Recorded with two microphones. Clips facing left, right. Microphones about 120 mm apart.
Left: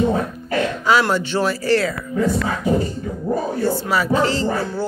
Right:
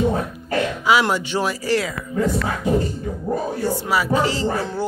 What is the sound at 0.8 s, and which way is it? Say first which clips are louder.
Speech: left 1 dB; 10° right (ahead or behind).